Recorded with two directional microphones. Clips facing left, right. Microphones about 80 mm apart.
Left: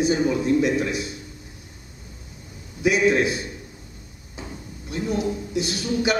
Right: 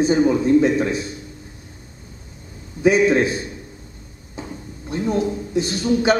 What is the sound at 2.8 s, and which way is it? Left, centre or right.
Speech, right.